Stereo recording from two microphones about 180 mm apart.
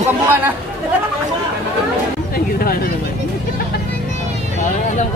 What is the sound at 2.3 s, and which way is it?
Speech, 55° left (ahead or behind).